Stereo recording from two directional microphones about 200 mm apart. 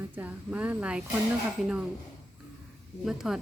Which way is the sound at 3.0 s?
Centre (ahead or behind).